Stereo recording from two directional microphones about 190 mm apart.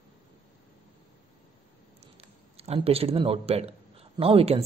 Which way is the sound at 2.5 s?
30° right (ahead or behind).